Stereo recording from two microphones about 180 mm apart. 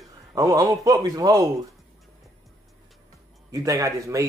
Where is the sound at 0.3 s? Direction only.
20° right (ahead or behind).